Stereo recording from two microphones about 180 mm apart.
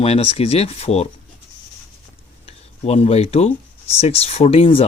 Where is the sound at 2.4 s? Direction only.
35° left (ahead or behind).